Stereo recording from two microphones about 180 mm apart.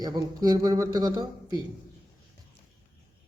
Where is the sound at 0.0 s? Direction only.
20° right (ahead or behind).